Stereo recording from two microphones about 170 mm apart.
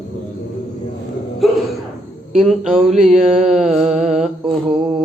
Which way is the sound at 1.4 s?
Centre (ahead or behind).